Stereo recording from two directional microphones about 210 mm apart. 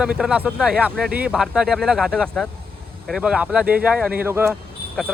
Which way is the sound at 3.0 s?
5° right (ahead or behind).